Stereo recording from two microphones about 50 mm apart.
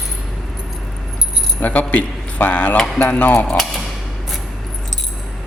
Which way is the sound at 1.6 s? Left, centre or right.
Left.